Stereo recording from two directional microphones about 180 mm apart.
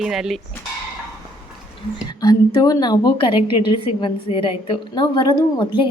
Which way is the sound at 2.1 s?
20° left (ahead or behind).